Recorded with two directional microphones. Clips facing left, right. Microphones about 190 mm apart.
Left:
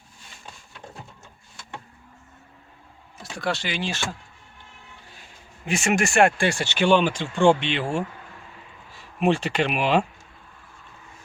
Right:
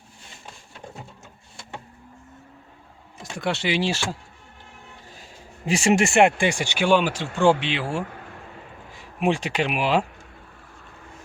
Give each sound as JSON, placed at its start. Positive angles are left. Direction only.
{"t": 3.5, "sound": "speech", "side_deg": -25}
{"t": 5.6, "sound": "speech", "side_deg": -30}